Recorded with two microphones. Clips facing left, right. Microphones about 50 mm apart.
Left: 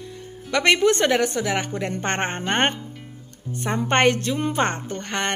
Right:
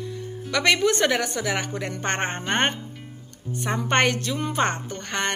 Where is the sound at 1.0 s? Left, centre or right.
Centre.